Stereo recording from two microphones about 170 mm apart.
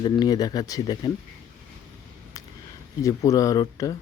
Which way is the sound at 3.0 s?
20° left (ahead or behind).